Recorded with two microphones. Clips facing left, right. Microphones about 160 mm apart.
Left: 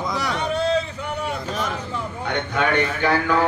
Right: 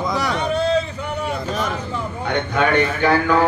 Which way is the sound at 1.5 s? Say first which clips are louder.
Right 3 dB; 50° right (ahead or behind).